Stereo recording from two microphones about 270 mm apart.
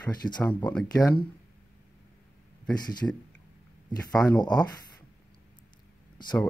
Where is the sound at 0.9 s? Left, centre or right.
Centre.